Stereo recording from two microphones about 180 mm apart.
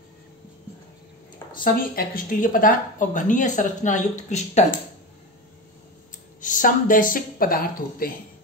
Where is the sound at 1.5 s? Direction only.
50° left (ahead or behind).